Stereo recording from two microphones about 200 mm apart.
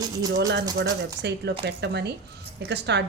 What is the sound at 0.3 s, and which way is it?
Speech, 60° right (ahead or behind).